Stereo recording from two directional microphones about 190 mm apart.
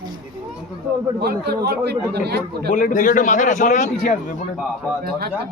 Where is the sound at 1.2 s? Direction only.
60° right (ahead or behind).